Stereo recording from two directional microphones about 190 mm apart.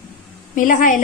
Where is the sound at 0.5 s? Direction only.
45° left (ahead or behind).